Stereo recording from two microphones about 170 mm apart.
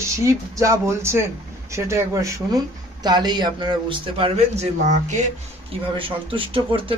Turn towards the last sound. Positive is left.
turn(degrees=-30)  # may be behind; listen again after turning